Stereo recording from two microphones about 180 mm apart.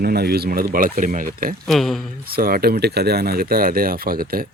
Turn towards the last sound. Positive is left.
turn(degrees=-55)  # may be behind; listen again after turning